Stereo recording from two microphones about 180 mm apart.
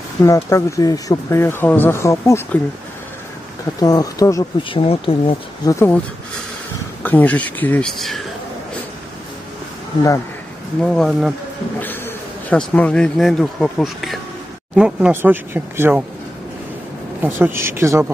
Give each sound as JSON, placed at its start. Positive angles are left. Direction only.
{"t": 0.2, "sound": "speech", "side_deg": 15}
{"t": 3.8, "sound": "speech", "side_deg": 20}
{"t": 5.7, "sound": "speech", "side_deg": 15}
{"t": 7.0, "sound": "speech", "side_deg": 10}
{"t": 10.8, "sound": "speech", "side_deg": 5}
{"t": 12.4, "sound": "speech", "side_deg": 5}
{"t": 17.2, "sound": "speech", "side_deg": -10}